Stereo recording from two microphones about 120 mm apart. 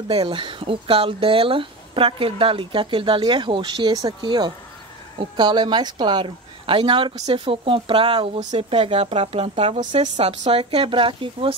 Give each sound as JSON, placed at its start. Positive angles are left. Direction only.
{"t": 0.1, "sound": "speech", "side_deg": -40}